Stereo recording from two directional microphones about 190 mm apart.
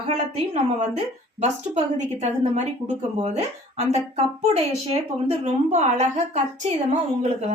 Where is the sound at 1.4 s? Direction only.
35° right (ahead or behind).